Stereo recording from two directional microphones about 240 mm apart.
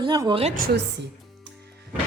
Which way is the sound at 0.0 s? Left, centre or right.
Centre.